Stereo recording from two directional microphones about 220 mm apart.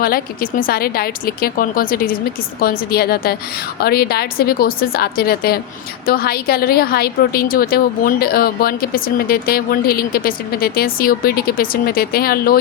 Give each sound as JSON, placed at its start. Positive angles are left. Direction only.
{"t": 0.0, "sound": "a woman's voice", "side_deg": 40}